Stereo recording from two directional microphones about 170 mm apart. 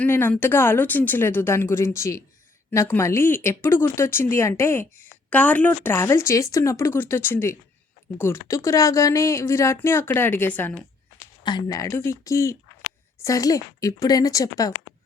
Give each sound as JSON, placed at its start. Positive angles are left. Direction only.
{"t": 0.0, "sound": "a woman's voice", "side_deg": 10}
{"t": 11.4, "sound": "speech", "side_deg": 25}